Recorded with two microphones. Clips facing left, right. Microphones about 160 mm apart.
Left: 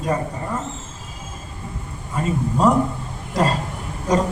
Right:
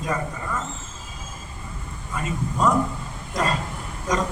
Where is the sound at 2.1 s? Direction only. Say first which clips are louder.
Left 5 dB; 30° left (ahead or behind).